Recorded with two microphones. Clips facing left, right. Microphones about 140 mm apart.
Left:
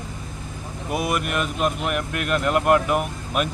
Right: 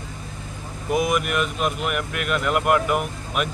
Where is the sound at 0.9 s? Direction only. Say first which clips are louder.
Right 3 dB; 5° left (ahead or behind).